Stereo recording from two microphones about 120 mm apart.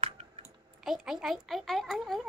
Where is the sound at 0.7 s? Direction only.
5° right (ahead or behind).